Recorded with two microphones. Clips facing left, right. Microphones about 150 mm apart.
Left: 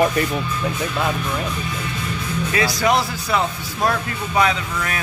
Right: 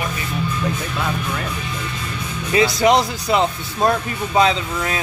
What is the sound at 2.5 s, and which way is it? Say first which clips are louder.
Speech: right 5 dB; 20° right (ahead or behind).